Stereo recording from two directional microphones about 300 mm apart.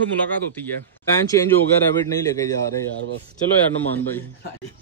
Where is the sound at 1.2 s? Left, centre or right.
Centre.